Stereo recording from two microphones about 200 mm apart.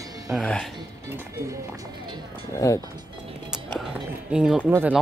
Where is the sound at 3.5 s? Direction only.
Centre (ahead or behind).